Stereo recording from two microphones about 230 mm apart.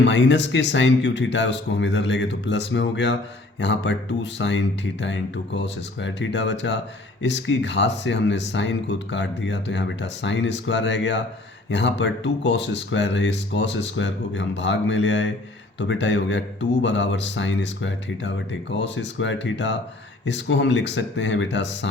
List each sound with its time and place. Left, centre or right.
0.0 s speech: left